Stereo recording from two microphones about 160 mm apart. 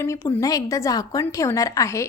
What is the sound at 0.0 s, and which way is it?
A woman's voice, 15° left (ahead or behind).